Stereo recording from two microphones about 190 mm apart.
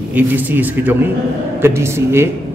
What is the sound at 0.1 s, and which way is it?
A man's voice, 10° right (ahead or behind).